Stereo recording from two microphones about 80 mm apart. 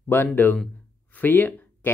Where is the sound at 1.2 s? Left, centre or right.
Left.